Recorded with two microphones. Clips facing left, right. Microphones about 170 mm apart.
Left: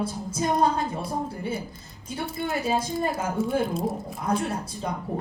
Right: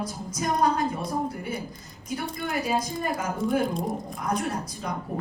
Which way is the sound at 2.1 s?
25° left (ahead or behind).